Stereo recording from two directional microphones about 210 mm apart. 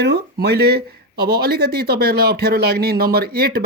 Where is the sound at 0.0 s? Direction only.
50° right (ahead or behind).